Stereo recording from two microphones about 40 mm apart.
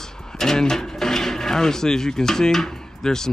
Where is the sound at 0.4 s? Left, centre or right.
Centre.